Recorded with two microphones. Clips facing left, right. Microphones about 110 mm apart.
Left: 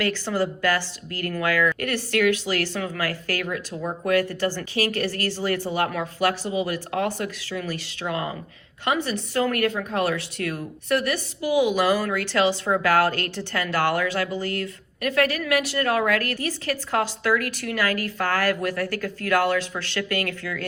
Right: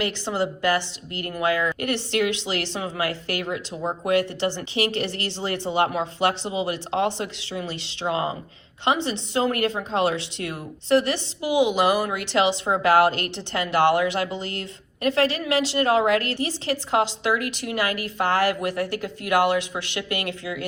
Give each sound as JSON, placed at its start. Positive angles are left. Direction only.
{"t": 0.0, "sound": "a woman's voice", "side_deg": -20}